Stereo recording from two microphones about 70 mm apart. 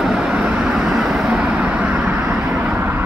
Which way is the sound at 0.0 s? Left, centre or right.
Centre.